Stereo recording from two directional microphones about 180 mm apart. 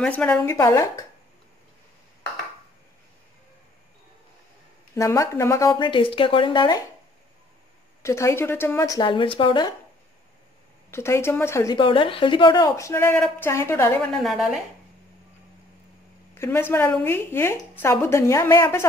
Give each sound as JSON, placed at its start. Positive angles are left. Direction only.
{"t": 0.0, "sound": "speech", "side_deg": 5}
{"t": 4.9, "sound": "a woman's voice", "side_deg": 15}
{"t": 8.0, "sound": "a woman's voice", "side_deg": 15}
{"t": 10.9, "sound": "speech", "side_deg": 15}
{"t": 14.1, "sound": "a woman's voice", "side_deg": 0}
{"t": 16.3, "sound": "speech", "side_deg": 15}